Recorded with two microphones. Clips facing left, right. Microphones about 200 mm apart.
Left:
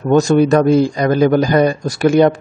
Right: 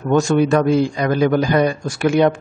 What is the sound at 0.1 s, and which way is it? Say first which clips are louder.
A man's voice: left 4 dB; 40° left (ahead or behind).